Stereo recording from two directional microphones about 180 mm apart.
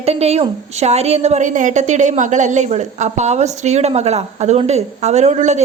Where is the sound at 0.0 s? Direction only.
35° right (ahead or behind).